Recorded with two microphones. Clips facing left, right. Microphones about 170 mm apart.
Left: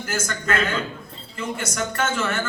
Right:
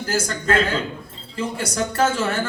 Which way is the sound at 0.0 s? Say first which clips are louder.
Right 4 dB; 30° right (ahead or behind).